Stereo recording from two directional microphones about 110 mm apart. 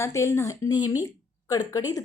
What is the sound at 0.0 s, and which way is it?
Speech, 25° left (ahead or behind).